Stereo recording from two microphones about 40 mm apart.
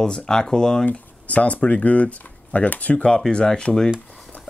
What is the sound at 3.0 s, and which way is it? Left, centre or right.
Speech, left.